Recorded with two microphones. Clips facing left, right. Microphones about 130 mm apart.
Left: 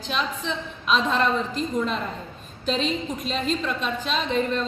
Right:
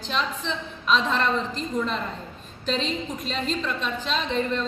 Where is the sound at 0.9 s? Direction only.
10° left (ahead or behind).